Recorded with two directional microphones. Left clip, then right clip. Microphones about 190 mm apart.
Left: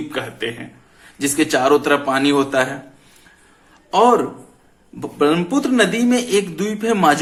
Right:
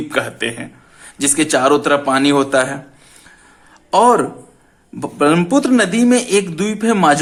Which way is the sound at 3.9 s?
40° right (ahead or behind).